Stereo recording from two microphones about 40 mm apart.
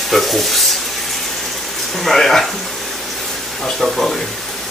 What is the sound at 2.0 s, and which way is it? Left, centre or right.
Speech, centre.